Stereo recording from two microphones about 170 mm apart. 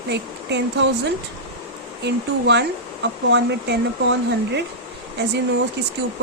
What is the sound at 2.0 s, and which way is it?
Speech, 90° right.